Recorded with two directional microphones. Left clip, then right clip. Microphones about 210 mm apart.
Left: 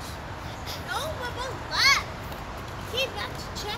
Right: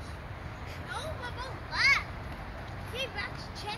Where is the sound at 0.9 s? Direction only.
50° left (ahead or behind).